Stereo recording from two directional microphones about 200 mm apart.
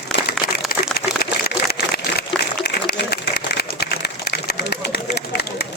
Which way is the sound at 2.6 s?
55° left (ahead or behind).